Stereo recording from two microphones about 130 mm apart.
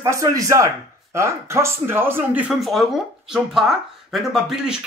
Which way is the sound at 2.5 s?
Centre (ahead or behind).